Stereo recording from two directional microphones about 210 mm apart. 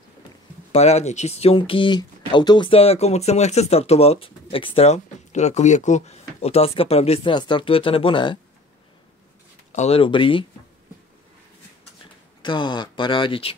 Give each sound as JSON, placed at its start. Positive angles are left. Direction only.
{"t": 0.7, "sound": "speech", "side_deg": 30}
{"t": 9.7, "sound": "speech", "side_deg": 30}
{"t": 12.4, "sound": "speech", "side_deg": 20}